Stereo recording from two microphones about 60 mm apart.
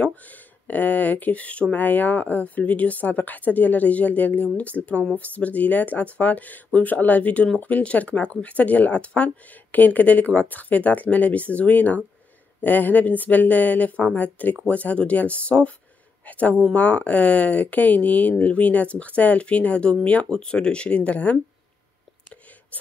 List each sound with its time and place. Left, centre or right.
0.0 s speech: left